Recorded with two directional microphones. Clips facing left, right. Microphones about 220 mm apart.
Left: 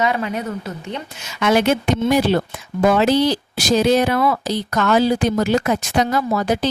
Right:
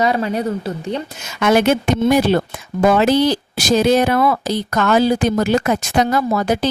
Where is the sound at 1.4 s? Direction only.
50° right (ahead or behind).